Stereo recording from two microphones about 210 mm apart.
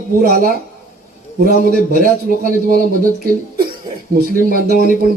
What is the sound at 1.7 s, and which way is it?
A man's voice, 40° right (ahead or behind).